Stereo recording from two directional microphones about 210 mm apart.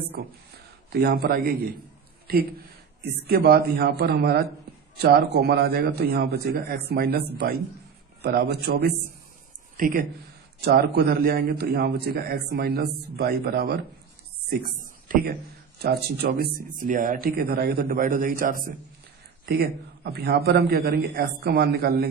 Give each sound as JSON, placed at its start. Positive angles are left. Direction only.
{"t": 0.9, "sound": "a man's voice", "side_deg": -50}
{"t": 14.8, "sound": "a sound", "side_deg": -40}
{"t": 15.8, "sound": "a man's voice", "side_deg": -50}